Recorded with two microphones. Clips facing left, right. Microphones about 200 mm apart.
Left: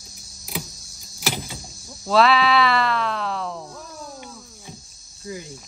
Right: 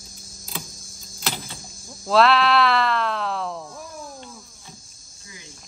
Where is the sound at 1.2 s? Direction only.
10° left (ahead or behind).